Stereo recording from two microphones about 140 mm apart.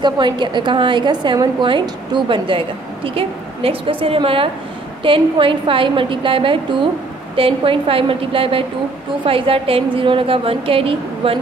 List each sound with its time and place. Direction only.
0.0 s a woman's voice: 35° right (ahead or behind)